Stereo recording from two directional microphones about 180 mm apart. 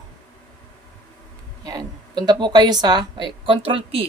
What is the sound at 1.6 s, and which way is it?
A woman's voice, 20° right (ahead or behind).